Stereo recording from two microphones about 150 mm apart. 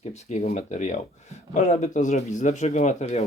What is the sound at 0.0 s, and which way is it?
Speech, 45° left (ahead or behind).